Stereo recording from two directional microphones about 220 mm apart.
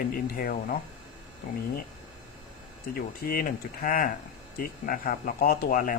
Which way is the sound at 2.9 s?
40° left (ahead or behind).